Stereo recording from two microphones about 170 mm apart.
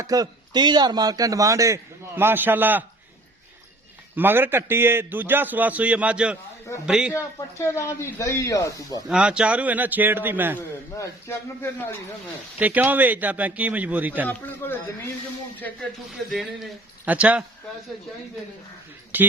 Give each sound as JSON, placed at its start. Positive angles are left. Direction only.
{"t": 0.0, "sound": "speech", "side_deg": -20}
{"t": 4.1, "sound": "a man's voice", "side_deg": -10}
{"t": 7.1, "sound": "speech", "side_deg": 15}
{"t": 9.0, "sound": "a man's voice", "side_deg": -5}
{"t": 10.9, "sound": "speech", "side_deg": 15}
{"t": 12.5, "sound": "a man's voice", "side_deg": -10}
{"t": 14.3, "sound": "speech", "side_deg": 10}
{"t": 16.3, "sound": "a man's voice", "side_deg": 0}
{"t": 19.1, "sound": "a man's voice", "side_deg": -10}